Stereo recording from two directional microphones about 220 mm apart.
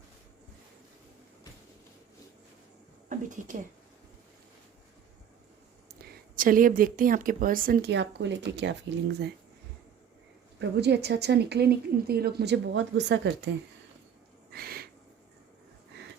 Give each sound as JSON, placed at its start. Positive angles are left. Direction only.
{"t": 3.1, "sound": "speech", "side_deg": -35}
{"t": 6.3, "sound": "speech", "side_deg": -40}
{"t": 10.6, "sound": "a woman's voice", "side_deg": -50}
{"t": 14.5, "sound": "a sound", "side_deg": -45}